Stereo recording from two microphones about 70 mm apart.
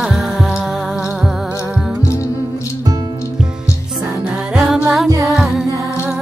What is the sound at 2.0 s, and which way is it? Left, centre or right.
Music, left.